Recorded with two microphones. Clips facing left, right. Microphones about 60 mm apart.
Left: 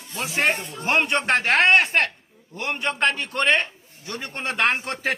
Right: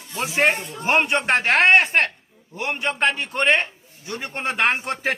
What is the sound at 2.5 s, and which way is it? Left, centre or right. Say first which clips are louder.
Speech: right 1 dB; centre.